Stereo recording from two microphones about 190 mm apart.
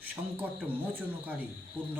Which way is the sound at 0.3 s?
10° right (ahead or behind).